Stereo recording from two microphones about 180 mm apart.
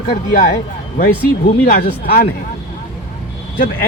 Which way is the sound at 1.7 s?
55° left (ahead or behind).